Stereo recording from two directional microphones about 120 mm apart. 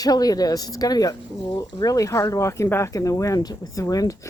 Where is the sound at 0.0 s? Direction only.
30° left (ahead or behind).